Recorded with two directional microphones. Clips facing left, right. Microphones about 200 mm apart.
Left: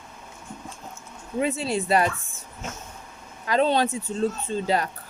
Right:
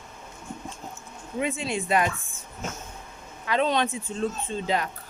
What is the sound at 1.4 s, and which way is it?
Speech, 40° left (ahead or behind).